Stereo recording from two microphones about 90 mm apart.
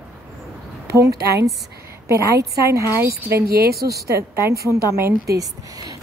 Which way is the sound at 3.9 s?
30° right (ahead or behind).